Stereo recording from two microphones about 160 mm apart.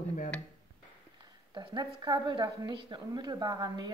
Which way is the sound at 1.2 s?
30° right (ahead or behind).